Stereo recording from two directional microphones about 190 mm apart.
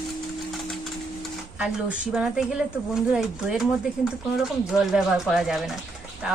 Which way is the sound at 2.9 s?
5° right (ahead or behind).